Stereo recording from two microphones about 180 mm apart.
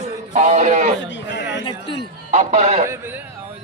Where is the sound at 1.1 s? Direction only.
80° left.